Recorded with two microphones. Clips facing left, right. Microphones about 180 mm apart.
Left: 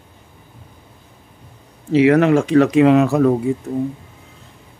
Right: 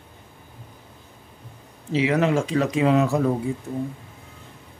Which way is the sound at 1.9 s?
60° left (ahead or behind).